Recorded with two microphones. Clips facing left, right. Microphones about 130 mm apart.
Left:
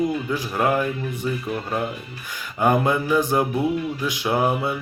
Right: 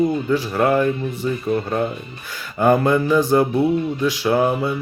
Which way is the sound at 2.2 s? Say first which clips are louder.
Right 4 dB; 15° left (ahead or behind).